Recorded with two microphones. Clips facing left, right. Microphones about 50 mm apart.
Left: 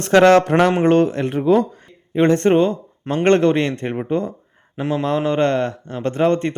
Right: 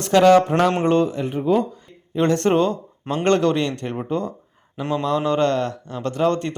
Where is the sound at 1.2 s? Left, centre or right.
Left.